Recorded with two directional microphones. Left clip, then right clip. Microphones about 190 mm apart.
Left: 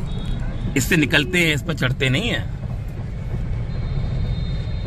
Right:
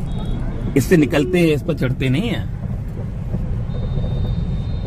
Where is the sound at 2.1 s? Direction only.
5° right (ahead or behind).